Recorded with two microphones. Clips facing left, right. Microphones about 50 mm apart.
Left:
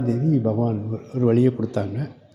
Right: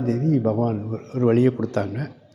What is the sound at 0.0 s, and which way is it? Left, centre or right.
A man's voice, right.